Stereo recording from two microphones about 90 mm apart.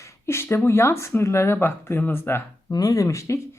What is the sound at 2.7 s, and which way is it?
Speech, 40° left (ahead or behind).